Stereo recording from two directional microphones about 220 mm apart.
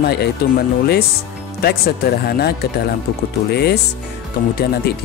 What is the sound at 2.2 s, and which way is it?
Speech, 45° left (ahead or behind).